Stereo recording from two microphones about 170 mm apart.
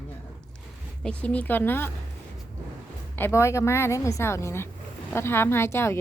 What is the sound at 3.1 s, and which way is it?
A woman's voice, 15° left (ahead or behind).